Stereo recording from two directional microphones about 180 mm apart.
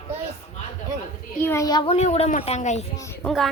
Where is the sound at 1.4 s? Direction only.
15° left (ahead or behind).